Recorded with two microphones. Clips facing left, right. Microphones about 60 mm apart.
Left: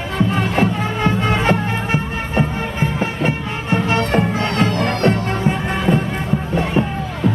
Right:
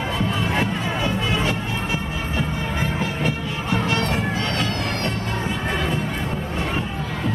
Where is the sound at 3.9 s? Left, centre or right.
Left.